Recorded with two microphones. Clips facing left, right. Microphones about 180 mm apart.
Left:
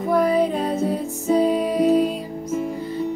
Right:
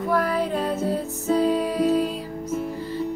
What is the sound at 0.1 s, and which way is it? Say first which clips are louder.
Music: left 5 dB; 20° left (ahead or behind).